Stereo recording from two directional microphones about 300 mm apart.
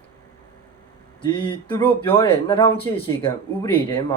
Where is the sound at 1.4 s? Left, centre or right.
Centre.